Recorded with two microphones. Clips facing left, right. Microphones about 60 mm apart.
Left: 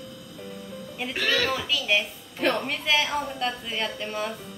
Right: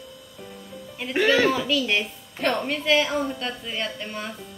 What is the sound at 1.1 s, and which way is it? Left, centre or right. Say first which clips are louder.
Speech: right 7 dB; centre.